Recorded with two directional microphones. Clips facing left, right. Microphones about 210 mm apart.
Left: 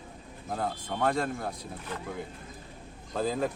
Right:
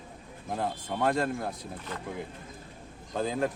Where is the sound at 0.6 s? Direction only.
Centre (ahead or behind).